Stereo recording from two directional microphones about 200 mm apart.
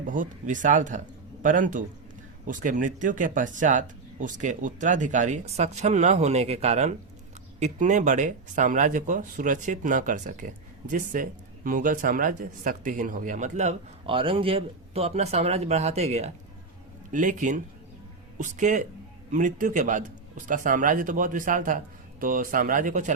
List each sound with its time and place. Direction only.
0.0 s speech: 40° right (ahead or behind)